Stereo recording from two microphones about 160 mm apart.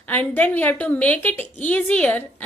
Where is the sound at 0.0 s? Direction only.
10° left (ahead or behind).